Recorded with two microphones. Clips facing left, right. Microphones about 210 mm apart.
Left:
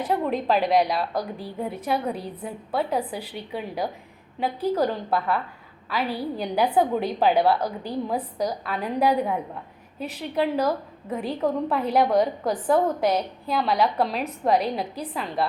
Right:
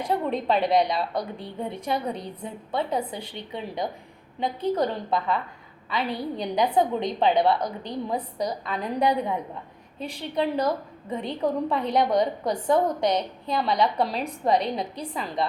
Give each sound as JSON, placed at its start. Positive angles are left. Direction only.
{"t": 0.0, "sound": "a woman's voice", "side_deg": 0}